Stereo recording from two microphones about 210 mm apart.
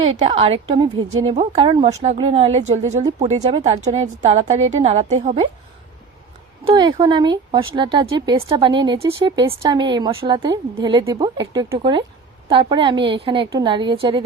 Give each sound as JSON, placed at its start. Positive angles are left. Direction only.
{"t": 0.0, "sound": "a woman's voice", "side_deg": -30}
{"t": 6.7, "sound": "speech", "side_deg": -25}